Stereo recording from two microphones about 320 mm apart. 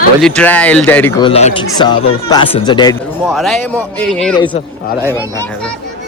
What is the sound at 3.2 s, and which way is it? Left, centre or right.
A man's voice, centre.